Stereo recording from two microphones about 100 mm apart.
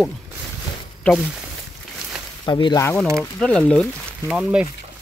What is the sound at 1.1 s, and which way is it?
Speech, 15° left (ahead or behind).